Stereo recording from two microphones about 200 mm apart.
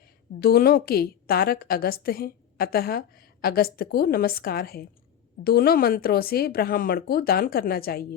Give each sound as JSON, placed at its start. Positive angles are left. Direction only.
{"t": 0.3, "sound": "a woman's voice", "side_deg": 50}